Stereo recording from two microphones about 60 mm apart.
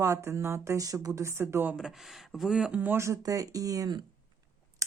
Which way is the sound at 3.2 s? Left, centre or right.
Right.